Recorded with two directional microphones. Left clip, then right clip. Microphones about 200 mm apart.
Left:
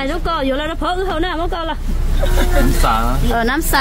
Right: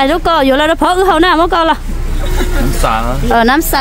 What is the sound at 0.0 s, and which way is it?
Speech, 40° right (ahead or behind).